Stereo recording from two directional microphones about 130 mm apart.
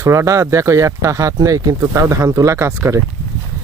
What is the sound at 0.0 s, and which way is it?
Speech, 25° right (ahead or behind).